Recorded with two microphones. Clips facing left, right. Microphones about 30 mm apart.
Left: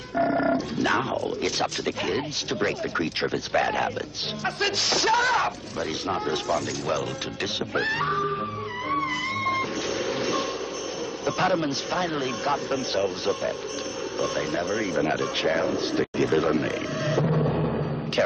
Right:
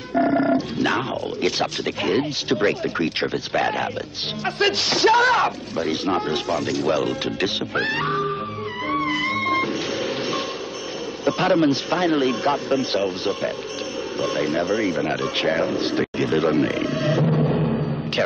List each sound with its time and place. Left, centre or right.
0.1 s dog: centre
0.7 s a man's voice: right
8.8 s music: right
11.2 s a man's voice: right
15.0 s a sound: right